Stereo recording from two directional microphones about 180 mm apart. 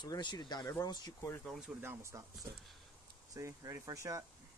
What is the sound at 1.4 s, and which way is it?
Speech, centre (ahead or behind).